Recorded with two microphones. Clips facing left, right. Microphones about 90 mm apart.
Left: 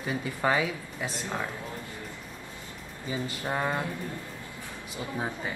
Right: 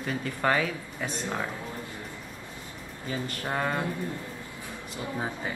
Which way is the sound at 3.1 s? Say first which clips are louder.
Even; 10° left (ahead or behind).